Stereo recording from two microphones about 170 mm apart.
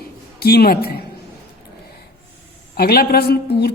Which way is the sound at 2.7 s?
65° left (ahead or behind).